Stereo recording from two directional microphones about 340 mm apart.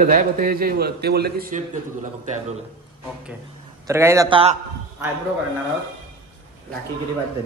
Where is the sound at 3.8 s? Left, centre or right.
Centre.